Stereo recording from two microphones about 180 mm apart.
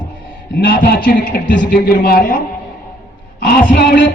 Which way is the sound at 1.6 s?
55° left (ahead or behind).